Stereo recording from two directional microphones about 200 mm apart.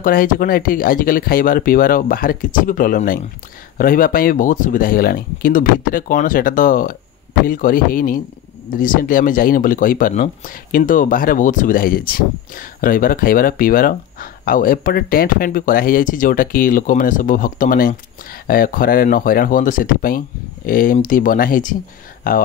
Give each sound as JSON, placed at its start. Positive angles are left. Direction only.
{"t": 0.0, "sound": "speech", "side_deg": 45}